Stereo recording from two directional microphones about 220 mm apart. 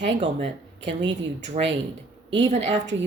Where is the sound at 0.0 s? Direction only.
30° right (ahead or behind).